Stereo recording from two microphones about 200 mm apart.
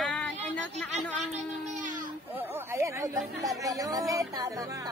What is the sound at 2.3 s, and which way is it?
Music, 10° right (ahead or behind).